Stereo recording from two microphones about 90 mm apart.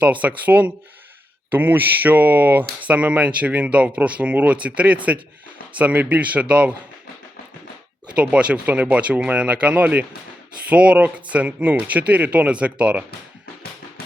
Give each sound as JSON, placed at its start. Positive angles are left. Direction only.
{"t": 0.0, "sound": "speech", "side_deg": -15}
{"t": 8.1, "sound": "speech", "side_deg": -10}